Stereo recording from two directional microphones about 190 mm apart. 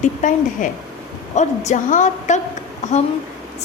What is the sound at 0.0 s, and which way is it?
A woman's voice, 40° left (ahead or behind).